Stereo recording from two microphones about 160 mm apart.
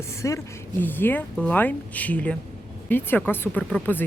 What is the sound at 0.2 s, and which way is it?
Speech, 20° left (ahead or behind).